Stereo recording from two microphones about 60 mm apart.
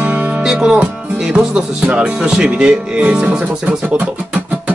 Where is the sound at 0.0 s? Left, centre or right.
Right.